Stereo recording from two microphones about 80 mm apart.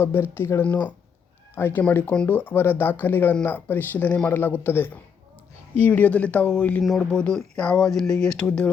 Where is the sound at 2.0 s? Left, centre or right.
Centre.